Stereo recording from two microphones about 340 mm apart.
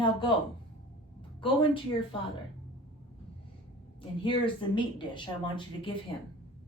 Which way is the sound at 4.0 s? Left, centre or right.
Centre.